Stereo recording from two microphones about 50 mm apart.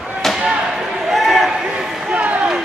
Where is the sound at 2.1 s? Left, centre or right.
Right.